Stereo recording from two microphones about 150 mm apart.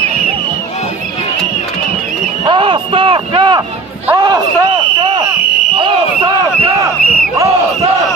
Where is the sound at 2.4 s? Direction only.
35° right (ahead or behind).